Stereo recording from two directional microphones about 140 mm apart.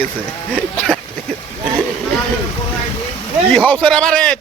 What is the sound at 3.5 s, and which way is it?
Speech, 5° left (ahead or behind).